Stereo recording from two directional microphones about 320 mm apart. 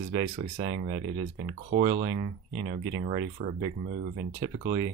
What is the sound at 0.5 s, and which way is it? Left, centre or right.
Speech, centre.